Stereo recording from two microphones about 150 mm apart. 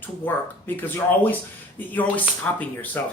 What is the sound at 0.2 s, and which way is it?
Speech, 15° left (ahead or behind).